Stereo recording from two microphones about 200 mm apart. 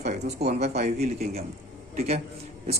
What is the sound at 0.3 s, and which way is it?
Speech, 35° right (ahead or behind).